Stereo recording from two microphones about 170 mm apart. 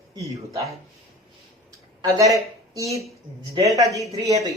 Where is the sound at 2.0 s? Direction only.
20° right (ahead or behind).